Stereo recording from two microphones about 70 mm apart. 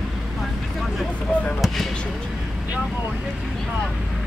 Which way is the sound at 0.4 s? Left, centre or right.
Centre.